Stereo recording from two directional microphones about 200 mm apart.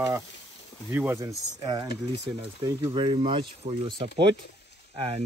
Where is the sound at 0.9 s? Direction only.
15° right (ahead or behind).